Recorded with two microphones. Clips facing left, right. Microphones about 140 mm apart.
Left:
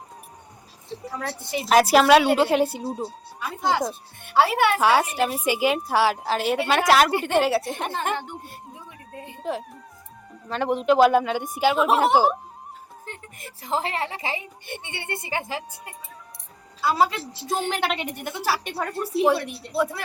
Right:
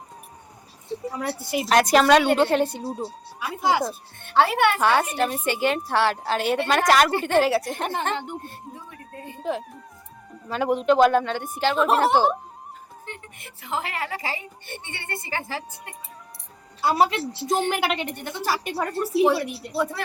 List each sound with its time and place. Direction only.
1.1 s a woman's voice: 10° right (ahead or behind)
4.2 s a woman's voice: 5° left (ahead or behind)
7.1 s a woman's voice: 15° left (ahead or behind)
7.3 s a woman's voice: centre (ahead or behind)
8.1 s speech: 20° right (ahead or behind)
8.4 s music: 15° left (ahead or behind)
9.4 s a woman's voice: centre (ahead or behind)
13.1 s a woman's voice: 35° left (ahead or behind); by 15.6 s 15° left (ahead or behind)
16.8 s a woman's voice: 20° right (ahead or behind); by 20.0 s centre (ahead or behind)